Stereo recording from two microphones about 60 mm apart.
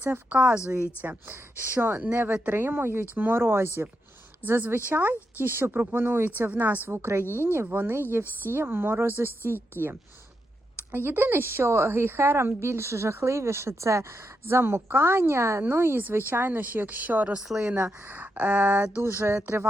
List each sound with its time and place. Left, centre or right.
0.0 s speech: right
0.3 s speech: centre
1.3 s speech: right
2.1 s speech: right
2.5 s speech: right
10.9 s a woman's voice: right
14.4 s a woman's voice: right
16.0 s speech: right
17.3 s speech: centre
18.1 s speech: right
19.1 s a woman's voice: right